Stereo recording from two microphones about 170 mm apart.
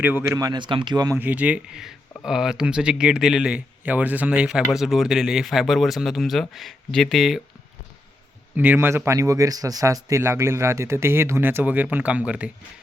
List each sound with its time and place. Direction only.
0.0 s speech: 15° right (ahead or behind)
1.2 s speech: 10° right (ahead or behind)
8.5 s speech: 10° right (ahead or behind)